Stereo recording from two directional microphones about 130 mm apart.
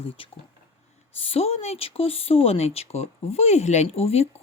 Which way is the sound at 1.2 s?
50° left (ahead or behind).